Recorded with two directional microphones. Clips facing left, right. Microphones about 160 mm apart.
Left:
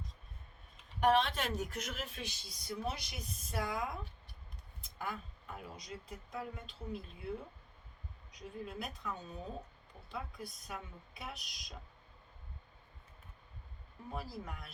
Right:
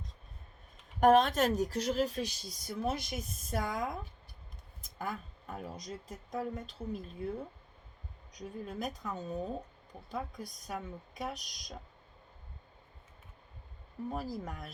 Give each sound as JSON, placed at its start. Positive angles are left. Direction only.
{"t": 0.9, "sound": "speech", "side_deg": -45}
{"t": 8.3, "sound": "speech", "side_deg": -40}
{"t": 14.1, "sound": "speech", "side_deg": -40}